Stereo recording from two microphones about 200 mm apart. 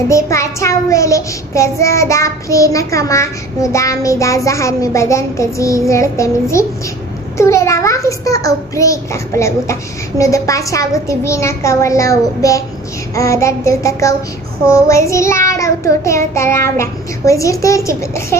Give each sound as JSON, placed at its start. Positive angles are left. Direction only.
{"t": 0.1, "sound": "a child's voice", "side_deg": 15}